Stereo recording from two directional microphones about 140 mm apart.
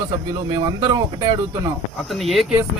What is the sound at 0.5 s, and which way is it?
Speech, 30° right (ahead or behind).